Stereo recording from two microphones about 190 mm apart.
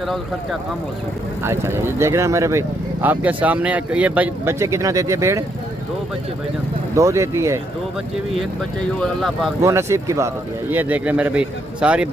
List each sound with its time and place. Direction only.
1.4 s speech: 15° right (ahead or behind)
7.0 s speech: 15° right (ahead or behind)
9.0 s speech: centre (ahead or behind)
9.6 s speech: 15° right (ahead or behind)